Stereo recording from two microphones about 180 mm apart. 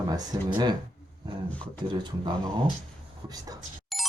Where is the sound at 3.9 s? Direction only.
Centre (ahead or behind).